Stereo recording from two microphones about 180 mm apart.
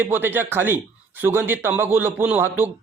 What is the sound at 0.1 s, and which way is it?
A man's voice, 10° right (ahead or behind).